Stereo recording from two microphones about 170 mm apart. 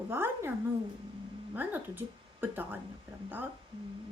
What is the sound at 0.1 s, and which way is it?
Speech, 15° right (ahead or behind).